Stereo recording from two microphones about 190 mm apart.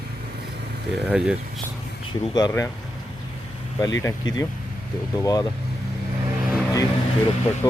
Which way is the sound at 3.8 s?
15° left (ahead or behind).